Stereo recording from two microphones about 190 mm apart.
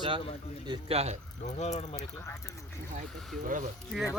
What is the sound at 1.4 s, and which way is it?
Speech, 35° left (ahead or behind).